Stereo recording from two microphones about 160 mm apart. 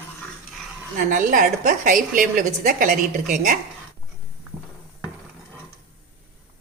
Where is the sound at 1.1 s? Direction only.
55° right (ahead or behind).